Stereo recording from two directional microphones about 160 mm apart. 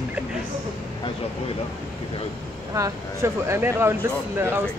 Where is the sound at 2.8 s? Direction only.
15° right (ahead or behind).